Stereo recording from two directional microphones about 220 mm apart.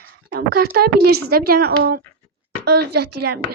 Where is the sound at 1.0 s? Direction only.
45° right (ahead or behind).